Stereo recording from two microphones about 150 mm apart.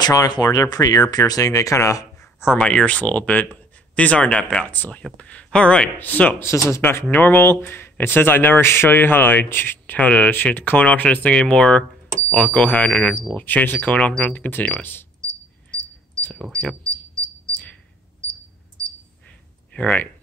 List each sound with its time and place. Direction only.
0.0 s speech: 25° left (ahead or behind)
2.5 s speech: 10° left (ahead or behind)
15.7 s cricket: 10° left (ahead or behind)
16.4 s speech: 5° left (ahead or behind)
19.7 s speech: 10° left (ahead or behind)